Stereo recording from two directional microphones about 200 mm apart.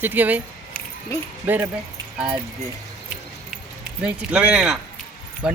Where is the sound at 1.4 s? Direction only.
10° right (ahead or behind).